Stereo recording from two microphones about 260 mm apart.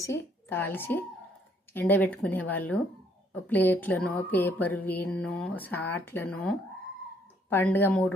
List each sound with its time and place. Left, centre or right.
0.0 s music: centre